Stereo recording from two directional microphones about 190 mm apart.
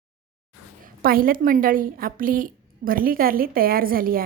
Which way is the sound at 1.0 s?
50° right (ahead or behind).